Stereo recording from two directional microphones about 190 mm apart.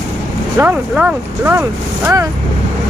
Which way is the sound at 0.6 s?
10° right (ahead or behind).